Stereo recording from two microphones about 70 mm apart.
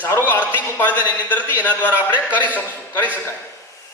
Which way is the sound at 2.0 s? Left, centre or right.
Right.